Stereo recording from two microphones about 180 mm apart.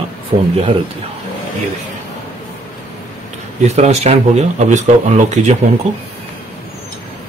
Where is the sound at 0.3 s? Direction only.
55° right (ahead or behind).